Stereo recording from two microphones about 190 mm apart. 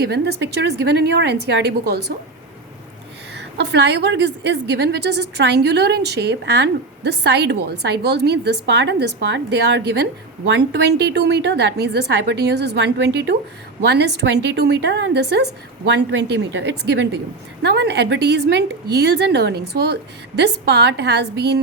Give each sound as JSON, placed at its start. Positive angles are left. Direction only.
{"t": 0.0, "sound": "a woman's voice", "side_deg": -60}
{"t": 3.3, "sound": "a woman's voice", "side_deg": -60}